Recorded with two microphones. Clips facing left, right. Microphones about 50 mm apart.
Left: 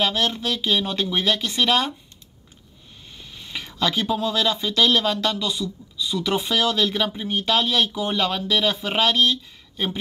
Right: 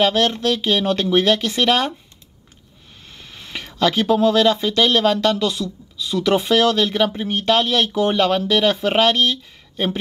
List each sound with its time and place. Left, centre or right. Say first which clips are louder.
0.0 s speech: right 6 dB; right
3.1 s a sound: right 2 dB; right
3.7 s speech: right 6 dB; right
5.4 s speech: right 5 dB; right
6.5 s speech: right 4 dB; right
8.1 s speech: right 5 dB; right